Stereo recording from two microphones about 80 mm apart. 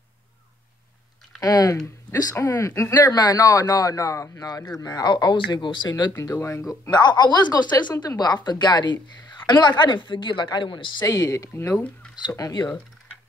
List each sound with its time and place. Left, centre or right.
1.4 s speech: left
2.3 s speech: left
6.1 s speech: left
6.9 s a woman's voice: left
11.1 s speech: left